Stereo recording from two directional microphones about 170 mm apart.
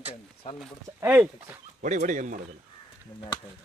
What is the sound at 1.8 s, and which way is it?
Speech, 45° right (ahead or behind).